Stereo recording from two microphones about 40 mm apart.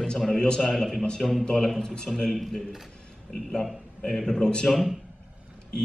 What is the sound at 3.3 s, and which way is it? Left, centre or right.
Speech, centre.